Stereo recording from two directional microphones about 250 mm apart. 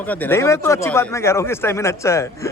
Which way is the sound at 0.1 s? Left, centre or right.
Centre.